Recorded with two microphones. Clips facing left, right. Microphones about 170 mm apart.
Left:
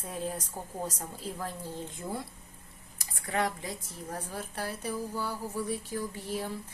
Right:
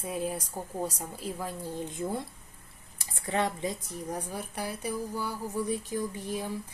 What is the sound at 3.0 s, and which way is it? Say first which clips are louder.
A woman's voice: right 2 dB; 25° right (ahead or behind).